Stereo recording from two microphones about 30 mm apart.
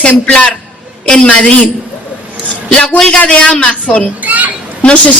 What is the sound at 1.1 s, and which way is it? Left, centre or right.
Speech, left.